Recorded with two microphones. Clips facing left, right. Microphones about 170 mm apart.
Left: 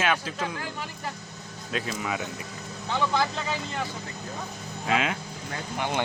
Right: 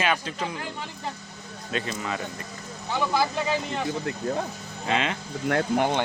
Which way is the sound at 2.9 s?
10° right (ahead or behind).